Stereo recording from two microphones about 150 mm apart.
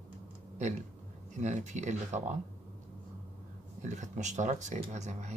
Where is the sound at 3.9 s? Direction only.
50° right (ahead or behind).